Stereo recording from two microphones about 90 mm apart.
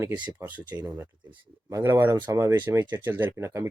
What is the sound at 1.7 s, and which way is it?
Speech, 30° right (ahead or behind).